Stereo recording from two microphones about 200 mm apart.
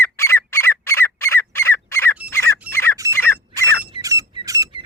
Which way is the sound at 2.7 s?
10° left (ahead or behind).